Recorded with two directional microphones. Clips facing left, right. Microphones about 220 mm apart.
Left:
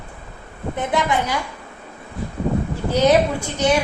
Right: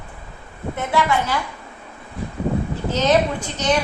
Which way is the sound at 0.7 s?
15° left (ahead or behind).